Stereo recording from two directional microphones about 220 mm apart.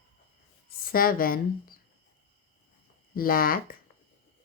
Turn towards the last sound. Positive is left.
turn(degrees=40)  # may be behind; listen again after turning